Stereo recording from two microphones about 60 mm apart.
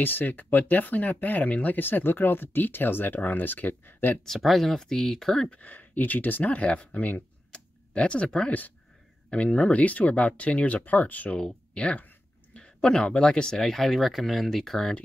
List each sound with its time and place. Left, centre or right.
0.0 s speech: left
4.2 s speech: centre
5.5 s speech: left; by 15.0 s centre